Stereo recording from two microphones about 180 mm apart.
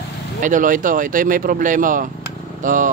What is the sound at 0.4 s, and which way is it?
Speech, 45° right (ahead or behind).